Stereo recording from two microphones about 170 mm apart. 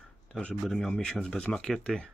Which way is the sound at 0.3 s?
5° left (ahead or behind).